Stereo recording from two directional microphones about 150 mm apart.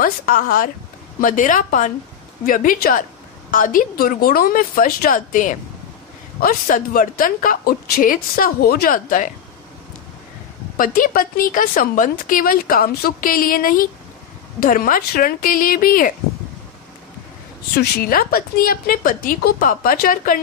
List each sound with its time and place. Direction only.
0.0 s a woman's voice: 70° left (ahead or behind)
6.4 s a woman's voice: 70° left (ahead or behind)
10.8 s a woman's voice: 70° left (ahead or behind)
17.7 s a woman's voice: 85° left; by 20.3 s 70° left (ahead or behind)